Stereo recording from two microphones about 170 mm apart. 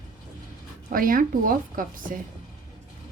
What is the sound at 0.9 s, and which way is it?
A woman's voice, 55° right (ahead or behind).